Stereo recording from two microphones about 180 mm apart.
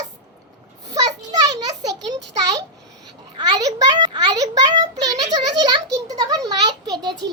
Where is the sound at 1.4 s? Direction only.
20° right (ahead or behind).